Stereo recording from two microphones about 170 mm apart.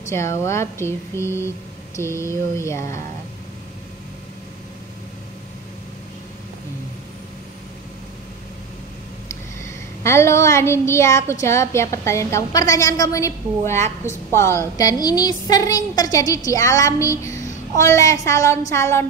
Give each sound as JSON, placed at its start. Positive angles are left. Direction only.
{"t": 0.1, "sound": "a woman's voice", "side_deg": 15}
{"t": 10.0, "sound": "a woman's voice", "side_deg": 15}